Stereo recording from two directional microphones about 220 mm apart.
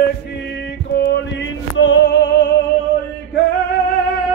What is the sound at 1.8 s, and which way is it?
Female singing, 50° left (ahead or behind).